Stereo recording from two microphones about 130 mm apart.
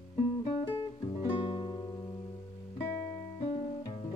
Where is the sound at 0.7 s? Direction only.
45° left (ahead or behind).